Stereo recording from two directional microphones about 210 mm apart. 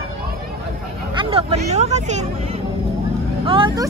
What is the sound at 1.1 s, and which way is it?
Hubbub, 30° right (ahead or behind).